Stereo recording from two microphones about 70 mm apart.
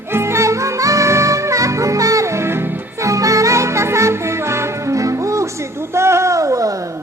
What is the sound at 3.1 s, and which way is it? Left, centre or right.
Music, right.